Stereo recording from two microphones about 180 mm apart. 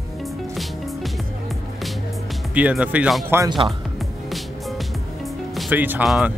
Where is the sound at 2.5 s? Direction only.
5° right (ahead or behind).